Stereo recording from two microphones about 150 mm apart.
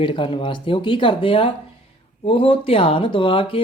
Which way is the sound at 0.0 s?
35° left (ahead or behind).